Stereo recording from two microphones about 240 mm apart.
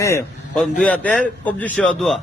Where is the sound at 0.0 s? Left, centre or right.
Centre.